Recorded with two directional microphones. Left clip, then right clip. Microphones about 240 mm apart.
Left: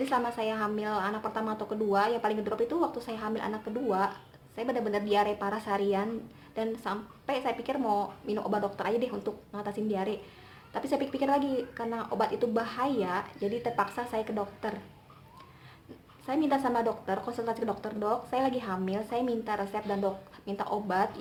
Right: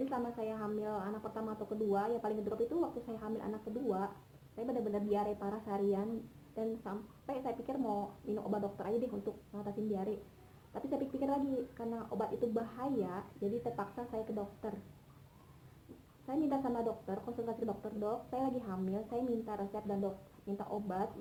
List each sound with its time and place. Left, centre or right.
0.1 s a woman's voice: centre
16.2 s a woman's voice: left